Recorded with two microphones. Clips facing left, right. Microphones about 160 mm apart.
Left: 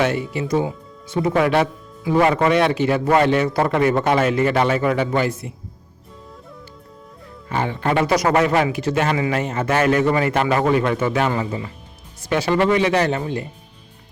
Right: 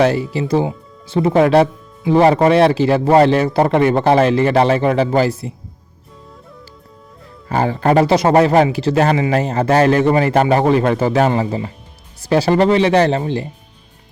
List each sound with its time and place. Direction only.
0.0 s speech: 35° right (ahead or behind)
7.4 s speech: 40° right (ahead or behind)